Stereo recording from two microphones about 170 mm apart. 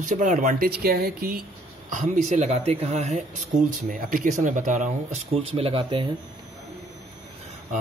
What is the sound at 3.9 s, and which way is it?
Speech, 50° right (ahead or behind).